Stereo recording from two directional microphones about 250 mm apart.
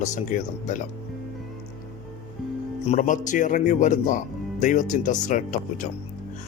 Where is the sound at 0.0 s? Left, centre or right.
Left.